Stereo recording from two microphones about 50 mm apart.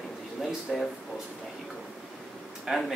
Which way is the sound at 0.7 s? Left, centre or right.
Centre.